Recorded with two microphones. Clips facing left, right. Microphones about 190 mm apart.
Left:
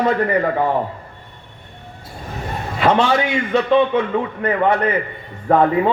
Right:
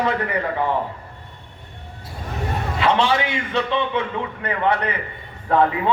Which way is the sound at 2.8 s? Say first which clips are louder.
Left 4 dB; 50° left (ahead or behind).